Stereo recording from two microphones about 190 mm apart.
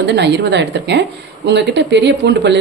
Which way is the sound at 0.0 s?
65° right (ahead or behind).